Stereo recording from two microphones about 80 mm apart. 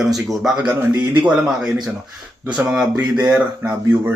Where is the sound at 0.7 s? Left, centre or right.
Right.